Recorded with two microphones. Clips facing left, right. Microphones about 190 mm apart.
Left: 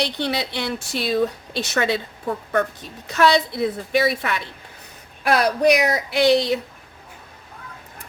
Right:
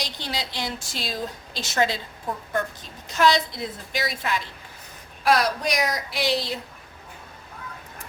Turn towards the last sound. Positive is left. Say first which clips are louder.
# left 9 dB
turn(degrees=65)  # may be behind; listen again after turning